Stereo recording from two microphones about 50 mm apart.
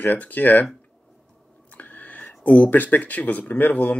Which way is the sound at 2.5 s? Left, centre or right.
Left.